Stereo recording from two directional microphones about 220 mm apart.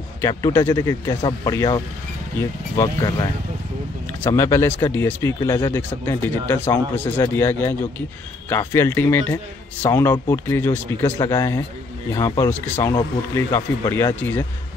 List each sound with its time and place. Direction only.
0.2 s a man's voice: 15° left (ahead or behind)
2.8 s a man's voice: 15° left (ahead or behind)